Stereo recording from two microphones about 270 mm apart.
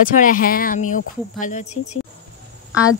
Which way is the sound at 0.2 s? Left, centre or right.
Left.